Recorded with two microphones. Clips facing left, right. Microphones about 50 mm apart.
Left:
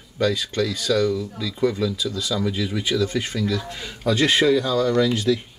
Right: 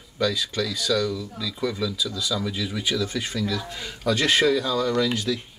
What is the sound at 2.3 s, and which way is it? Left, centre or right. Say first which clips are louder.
Speech: left 4 dB; centre.